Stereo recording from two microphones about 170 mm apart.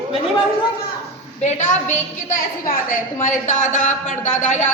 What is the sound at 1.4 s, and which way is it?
A woman's voice, 45° left (ahead or behind).